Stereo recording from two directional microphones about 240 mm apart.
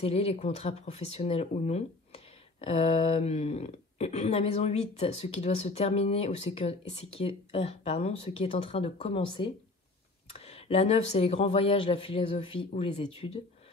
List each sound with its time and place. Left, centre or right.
0.0 s speech: left